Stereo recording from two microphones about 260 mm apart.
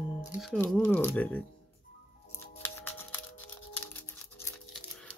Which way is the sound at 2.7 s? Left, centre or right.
Centre.